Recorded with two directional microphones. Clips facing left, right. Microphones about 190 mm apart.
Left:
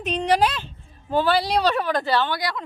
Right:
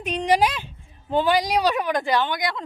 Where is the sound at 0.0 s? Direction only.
10° right (ahead or behind).